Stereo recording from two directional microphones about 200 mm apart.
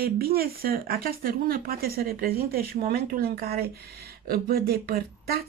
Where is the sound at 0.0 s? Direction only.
50° right (ahead or behind).